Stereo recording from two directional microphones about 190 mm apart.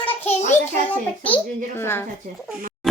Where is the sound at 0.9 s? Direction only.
10° left (ahead or behind).